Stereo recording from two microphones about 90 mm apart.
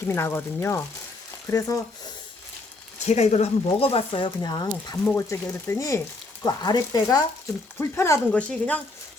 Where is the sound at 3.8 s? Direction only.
90° left; by 4.9 s 50° left (ahead or behind).